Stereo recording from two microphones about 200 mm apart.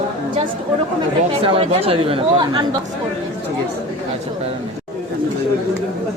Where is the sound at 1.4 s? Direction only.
30° right (ahead or behind).